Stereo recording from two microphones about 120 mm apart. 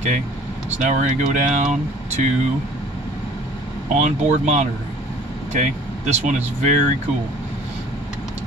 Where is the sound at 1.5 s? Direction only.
90° right.